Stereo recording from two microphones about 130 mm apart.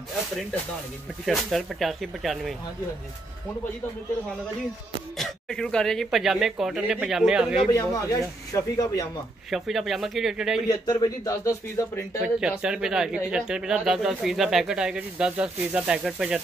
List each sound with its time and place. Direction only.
1.2 s speech: centre (ahead or behind)
5.1 s speech: 5° left (ahead or behind)
7.7 s speech: 25° left (ahead or behind)
9.5 s speech: centre (ahead or behind)
10.7 s speech: 25° left (ahead or behind)
12.4 s speech: 5° right (ahead or behind)